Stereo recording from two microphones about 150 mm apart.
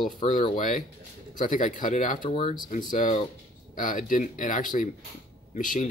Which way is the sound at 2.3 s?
35° left (ahead or behind).